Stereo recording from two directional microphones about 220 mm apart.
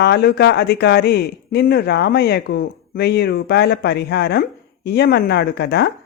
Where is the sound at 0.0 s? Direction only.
50° left (ahead or behind).